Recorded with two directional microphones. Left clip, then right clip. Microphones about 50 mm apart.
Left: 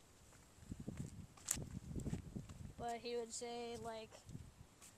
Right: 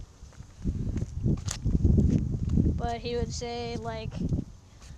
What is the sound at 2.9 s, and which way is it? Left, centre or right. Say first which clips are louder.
Speech: right 13 dB; left.